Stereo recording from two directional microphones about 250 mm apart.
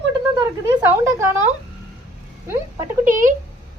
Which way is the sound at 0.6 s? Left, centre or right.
Centre.